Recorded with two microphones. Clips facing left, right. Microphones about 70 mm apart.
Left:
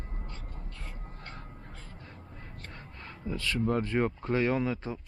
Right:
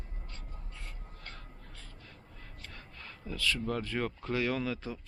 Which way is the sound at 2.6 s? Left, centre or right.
Left.